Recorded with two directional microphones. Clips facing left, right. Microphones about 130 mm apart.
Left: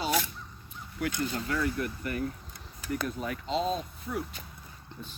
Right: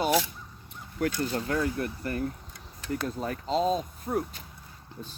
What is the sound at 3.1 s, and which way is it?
Speech, 35° right (ahead or behind).